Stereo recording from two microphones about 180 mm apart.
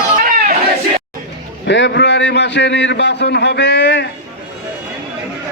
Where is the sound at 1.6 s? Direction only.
75° left (ahead or behind).